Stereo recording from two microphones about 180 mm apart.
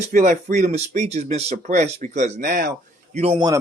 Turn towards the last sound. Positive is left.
turn(degrees=-35)  # may be behind; listen again after turning